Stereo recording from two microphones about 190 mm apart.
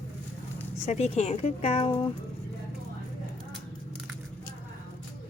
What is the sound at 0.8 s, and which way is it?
A woman's voice, 35° left (ahead or behind).